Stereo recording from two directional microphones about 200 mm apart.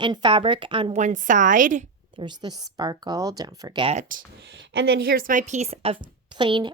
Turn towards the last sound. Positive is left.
turn(degrees=-25)  # may be behind; listen again after turning